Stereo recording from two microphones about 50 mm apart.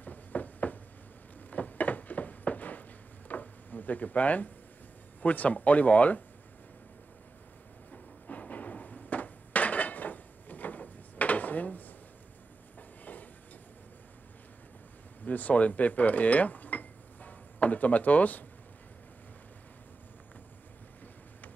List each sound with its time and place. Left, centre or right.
0.0 s a sound: left
5.2 s speech: left
7.9 s hammer: left
13.0 s train: left
15.2 s speech: left